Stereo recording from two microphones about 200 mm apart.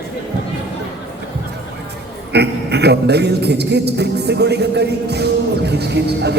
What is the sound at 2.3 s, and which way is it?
A man's voice, 55° right (ahead or behind).